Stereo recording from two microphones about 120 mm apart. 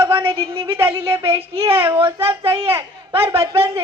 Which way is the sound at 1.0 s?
20° right (ahead or behind).